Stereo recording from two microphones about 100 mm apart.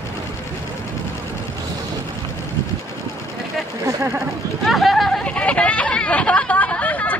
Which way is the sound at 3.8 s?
30° right (ahead or behind).